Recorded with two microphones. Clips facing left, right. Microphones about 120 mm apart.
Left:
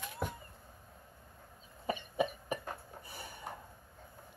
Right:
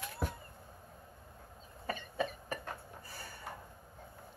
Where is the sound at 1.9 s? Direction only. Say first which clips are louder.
Left 3 dB; 15° left (ahead or behind).